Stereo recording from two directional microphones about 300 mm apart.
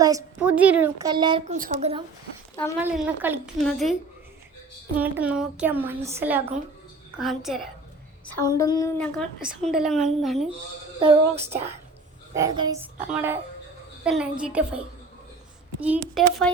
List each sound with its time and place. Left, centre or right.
0.0 s a woman's voice: centre
2.8 s a woman's voice: centre
4.9 s a woman's voice: centre
8.4 s a woman's voice: centre
11.0 s a woman's voice: right; by 14.8 s centre
15.8 s a woman's voice: centre